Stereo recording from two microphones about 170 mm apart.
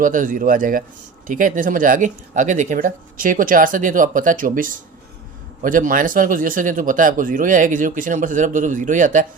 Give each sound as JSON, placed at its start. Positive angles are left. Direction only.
{"t": 0.0, "sound": "speech", "side_deg": -50}